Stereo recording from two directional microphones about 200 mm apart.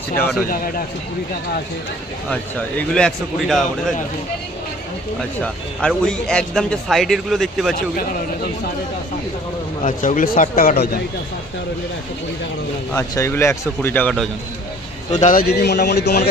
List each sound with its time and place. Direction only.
2.3 s a man's voice: 5° left (ahead or behind)
5.4 s a man's voice: 5° left (ahead or behind)
9.8 s speech: 40° left (ahead or behind)
12.9 s speech: 15° left (ahead or behind)
15.2 s speech: 45° left (ahead or behind)